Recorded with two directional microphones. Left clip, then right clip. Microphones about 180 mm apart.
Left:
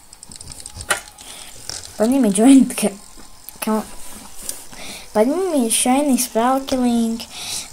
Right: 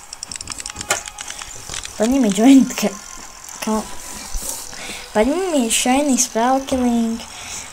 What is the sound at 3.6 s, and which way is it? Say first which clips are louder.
Mechanisms: even; 5° left (ahead or behind).